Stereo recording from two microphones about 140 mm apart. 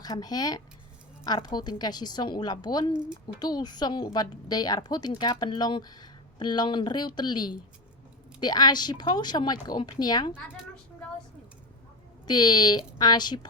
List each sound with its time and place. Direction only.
0.0 s a woman's voice: 30° left (ahead or behind)
12.3 s a woman's voice: 30° left (ahead or behind)